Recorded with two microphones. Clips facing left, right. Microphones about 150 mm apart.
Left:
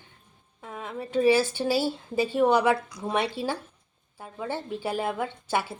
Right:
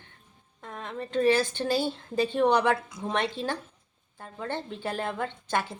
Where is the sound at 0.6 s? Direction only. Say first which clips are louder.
Left 1 dB; 5° left (ahead or behind).